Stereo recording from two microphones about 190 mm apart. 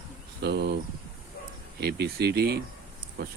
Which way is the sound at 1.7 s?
60° right (ahead or behind).